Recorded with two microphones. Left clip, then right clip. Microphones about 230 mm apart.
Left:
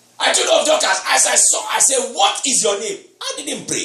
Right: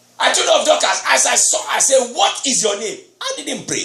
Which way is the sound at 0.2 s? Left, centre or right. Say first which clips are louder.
Right 1 dB; right.